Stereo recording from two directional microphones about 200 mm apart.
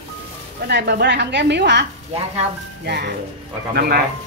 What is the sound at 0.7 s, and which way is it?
Speech, 55° right (ahead or behind).